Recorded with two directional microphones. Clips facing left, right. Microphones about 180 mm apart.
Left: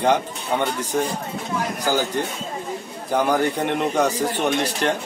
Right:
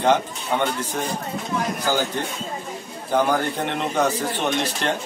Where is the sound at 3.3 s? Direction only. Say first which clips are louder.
Left 3 dB; 10° left (ahead or behind).